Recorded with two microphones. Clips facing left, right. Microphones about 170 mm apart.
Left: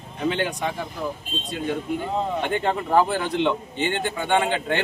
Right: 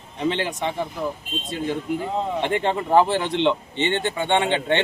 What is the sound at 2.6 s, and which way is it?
Speech, 25° right (ahead or behind).